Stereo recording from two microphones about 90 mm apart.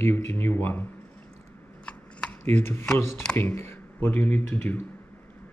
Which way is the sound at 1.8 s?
15° left (ahead or behind).